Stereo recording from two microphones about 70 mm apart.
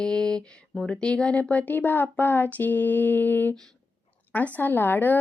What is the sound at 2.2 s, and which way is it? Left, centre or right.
Mantra, left.